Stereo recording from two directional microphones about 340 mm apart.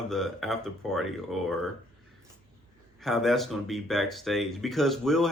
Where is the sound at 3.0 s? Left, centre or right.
Centre.